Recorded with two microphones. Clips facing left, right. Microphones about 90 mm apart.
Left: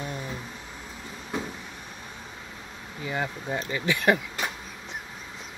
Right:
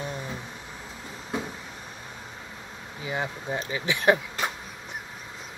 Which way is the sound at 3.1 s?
15° right (ahead or behind).